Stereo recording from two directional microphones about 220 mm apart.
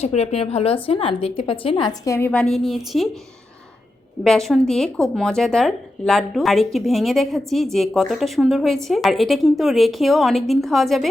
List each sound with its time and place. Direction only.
0.0 s speech: 30° left (ahead or behind); by 3.1 s centre (ahead or behind)
4.2 s speech: centre (ahead or behind)